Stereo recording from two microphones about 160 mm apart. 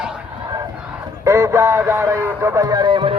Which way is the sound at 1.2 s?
20° right (ahead or behind).